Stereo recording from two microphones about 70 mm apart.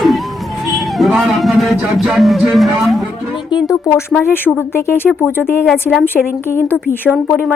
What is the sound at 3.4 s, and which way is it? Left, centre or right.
Speech, left.